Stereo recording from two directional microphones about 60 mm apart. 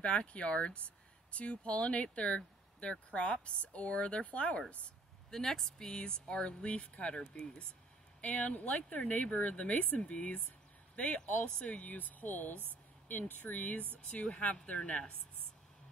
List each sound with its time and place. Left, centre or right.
0.0 s speech: left
5.3 s speech: centre